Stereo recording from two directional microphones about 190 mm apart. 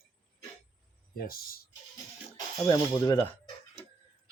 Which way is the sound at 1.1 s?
50° left (ahead or behind).